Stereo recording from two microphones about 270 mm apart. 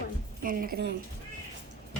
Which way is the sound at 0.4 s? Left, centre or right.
Right.